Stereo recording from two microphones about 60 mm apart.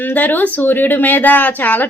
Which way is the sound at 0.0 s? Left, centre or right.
Left.